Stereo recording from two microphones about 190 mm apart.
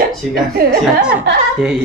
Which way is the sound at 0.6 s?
50° right (ahead or behind).